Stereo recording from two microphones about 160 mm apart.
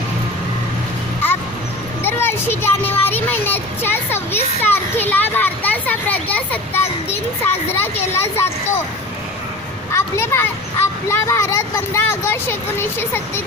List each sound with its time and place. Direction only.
2.0 s a sound: 15° left (ahead or behind)
4.6 s children playing: 10° left (ahead or behind)
7.1 s a child's voice: 15° left (ahead or behind)
9.9 s a child's voice: 15° left (ahead or behind)